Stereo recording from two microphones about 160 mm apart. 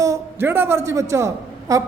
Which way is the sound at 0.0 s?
15° right (ahead or behind).